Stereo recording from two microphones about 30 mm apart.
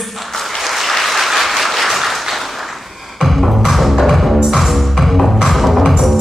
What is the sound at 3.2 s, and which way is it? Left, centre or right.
Music, centre.